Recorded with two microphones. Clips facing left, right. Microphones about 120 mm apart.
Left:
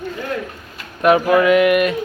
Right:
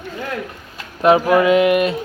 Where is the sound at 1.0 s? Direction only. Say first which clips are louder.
Even; 25° right (ahead or behind).